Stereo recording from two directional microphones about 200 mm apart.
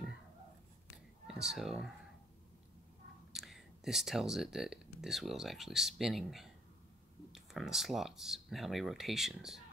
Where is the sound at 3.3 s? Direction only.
Centre (ahead or behind).